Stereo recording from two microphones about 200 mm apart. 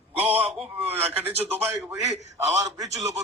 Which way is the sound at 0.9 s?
10° right (ahead or behind).